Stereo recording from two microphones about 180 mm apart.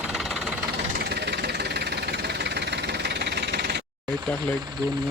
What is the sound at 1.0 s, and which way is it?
Vehicle, 65° right (ahead or behind).